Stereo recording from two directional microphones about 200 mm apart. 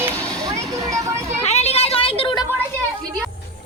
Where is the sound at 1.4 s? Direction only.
30° left (ahead or behind).